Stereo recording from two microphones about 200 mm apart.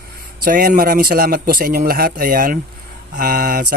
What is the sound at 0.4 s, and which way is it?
Speech, 45° right (ahead or behind).